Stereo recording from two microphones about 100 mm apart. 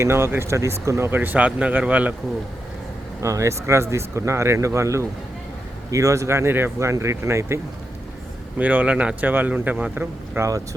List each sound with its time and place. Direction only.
0.0 s speech: 25° right (ahead or behind)
3.2 s speech: 30° right (ahead or behind)
8.5 s speech: 15° right (ahead or behind)